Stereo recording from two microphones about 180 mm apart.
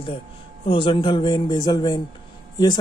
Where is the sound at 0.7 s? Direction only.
30° left (ahead or behind).